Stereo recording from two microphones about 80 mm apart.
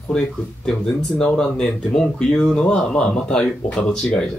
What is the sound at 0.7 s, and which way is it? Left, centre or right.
Speech, centre.